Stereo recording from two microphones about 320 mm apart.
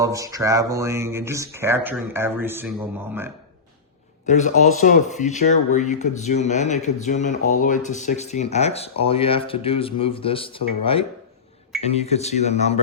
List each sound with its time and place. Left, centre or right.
0.0 s speech: centre
4.3 s speech: left